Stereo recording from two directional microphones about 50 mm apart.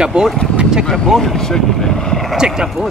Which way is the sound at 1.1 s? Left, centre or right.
Centre.